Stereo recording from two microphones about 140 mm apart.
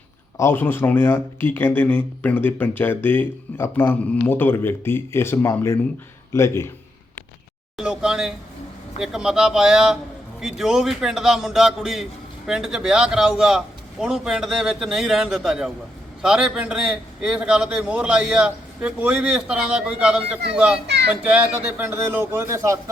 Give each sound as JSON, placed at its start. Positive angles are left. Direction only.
{"t": 0.3, "sound": "speech", "side_deg": 15}
{"t": 7.8, "sound": "a sound", "side_deg": -5}
{"t": 9.0, "sound": "a man's voice", "side_deg": -5}